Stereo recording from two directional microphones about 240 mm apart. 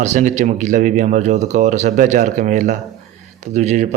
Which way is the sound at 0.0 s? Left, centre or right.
Right.